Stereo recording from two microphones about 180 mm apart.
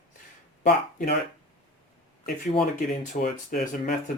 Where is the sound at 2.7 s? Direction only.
50° left (ahead or behind).